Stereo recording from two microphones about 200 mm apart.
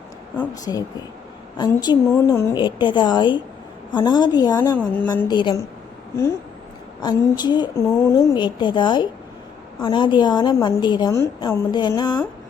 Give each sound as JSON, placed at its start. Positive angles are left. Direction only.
{"t": 0.3, "sound": "a woman's voice", "side_deg": 20}
{"t": 7.0, "sound": "a woman's voice", "side_deg": 20}